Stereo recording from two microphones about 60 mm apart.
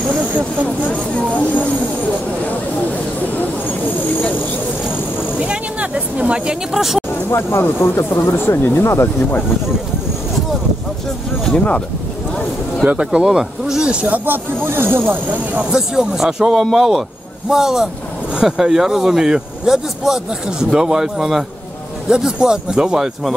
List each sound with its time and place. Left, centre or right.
5.4 s a sound: centre
6.7 s speech: centre
7.2 s speech: left
8.8 s speech: left
11.5 s speech: left
12.9 s speech: centre
13.8 s speech: right
15.7 s speech: centre